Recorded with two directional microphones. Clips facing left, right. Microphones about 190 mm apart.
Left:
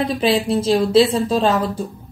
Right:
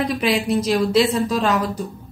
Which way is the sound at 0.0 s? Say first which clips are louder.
Left 2 dB; 30° left (ahead or behind).